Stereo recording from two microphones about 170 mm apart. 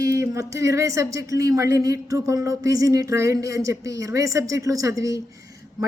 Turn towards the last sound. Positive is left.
turn(degrees=-20)  # may be behind; listen again after turning